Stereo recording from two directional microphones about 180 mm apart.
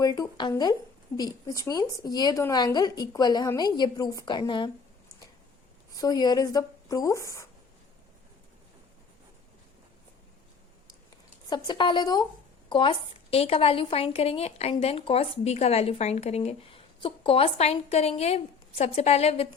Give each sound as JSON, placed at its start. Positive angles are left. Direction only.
{"t": 0.0, "sound": "speech", "side_deg": 20}
{"t": 6.0, "sound": "speech", "side_deg": 20}
{"t": 11.4, "sound": "a woman's voice", "side_deg": 25}